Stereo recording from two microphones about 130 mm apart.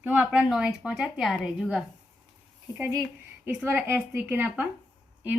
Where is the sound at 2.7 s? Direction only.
25° right (ahead or behind).